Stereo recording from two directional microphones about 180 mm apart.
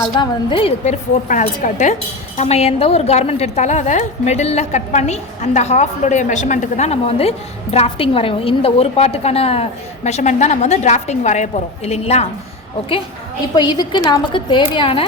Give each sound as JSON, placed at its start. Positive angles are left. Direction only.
{"t": 0.1, "sound": "a woman's voice", "side_deg": 25}
{"t": 1.3, "sound": "a woman's voice", "side_deg": 45}
{"t": 13.6, "sound": "a woman's voice", "side_deg": 25}